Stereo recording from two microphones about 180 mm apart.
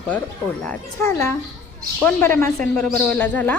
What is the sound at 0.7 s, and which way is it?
Speech, 15° left (ahead or behind).